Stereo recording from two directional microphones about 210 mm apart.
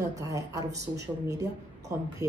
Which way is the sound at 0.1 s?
15° right (ahead or behind).